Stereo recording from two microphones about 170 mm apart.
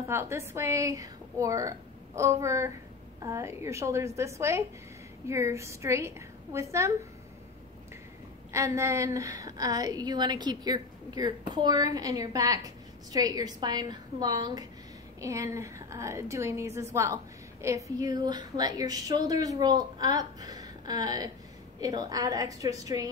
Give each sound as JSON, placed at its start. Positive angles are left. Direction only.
{"t": 0.1, "sound": "a woman's voice", "side_deg": -15}
{"t": 8.5, "sound": "a woman's voice", "side_deg": -15}